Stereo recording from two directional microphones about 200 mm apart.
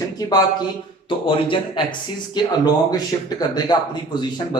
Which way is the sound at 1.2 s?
25° left (ahead or behind).